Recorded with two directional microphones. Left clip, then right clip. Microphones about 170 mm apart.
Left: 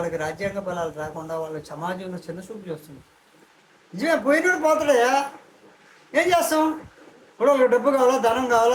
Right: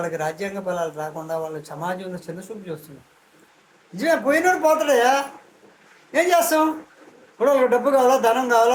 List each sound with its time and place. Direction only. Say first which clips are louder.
0.0 s a man's voice: right 1 dB; 15° right (ahead or behind)
3.9 s a man's voice: right 1 dB; 15° right (ahead or behind)